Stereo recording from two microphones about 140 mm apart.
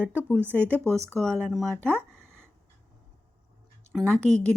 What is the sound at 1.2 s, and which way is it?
Speech, 5° left (ahead or behind).